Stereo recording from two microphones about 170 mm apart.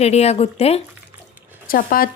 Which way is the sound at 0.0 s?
40° left (ahead or behind).